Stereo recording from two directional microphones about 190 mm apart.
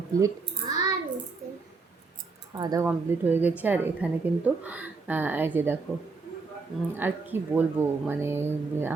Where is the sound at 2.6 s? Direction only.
20° right (ahead or behind).